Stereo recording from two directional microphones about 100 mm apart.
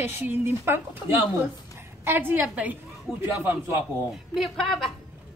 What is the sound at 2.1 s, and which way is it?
A woman's voice, 20° right (ahead or behind).